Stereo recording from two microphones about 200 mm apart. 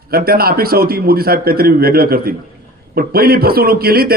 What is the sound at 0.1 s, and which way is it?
A man's voice, 50° right (ahead or behind).